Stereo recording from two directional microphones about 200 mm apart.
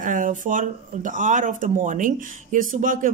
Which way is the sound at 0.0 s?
40° right (ahead or behind).